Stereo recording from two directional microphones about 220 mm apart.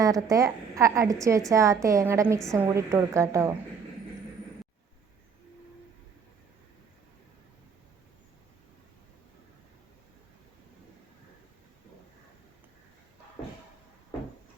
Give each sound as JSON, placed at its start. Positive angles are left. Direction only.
{"t": 0.0, "sound": "a woman's voice", "side_deg": -15}